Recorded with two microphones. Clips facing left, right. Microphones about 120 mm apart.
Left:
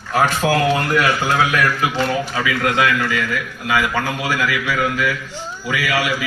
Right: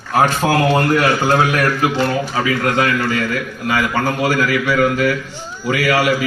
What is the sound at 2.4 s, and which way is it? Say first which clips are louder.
A man's voice: even; 40° right (ahead or behind).